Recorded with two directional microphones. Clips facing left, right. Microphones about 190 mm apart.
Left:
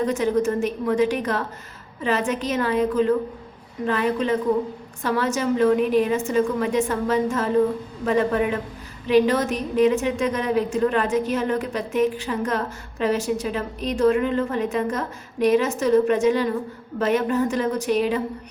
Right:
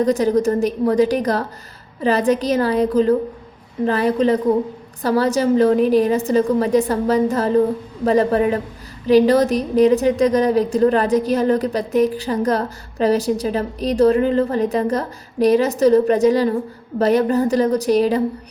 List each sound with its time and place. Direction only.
0.0 s a woman's voice: 35° right (ahead or behind)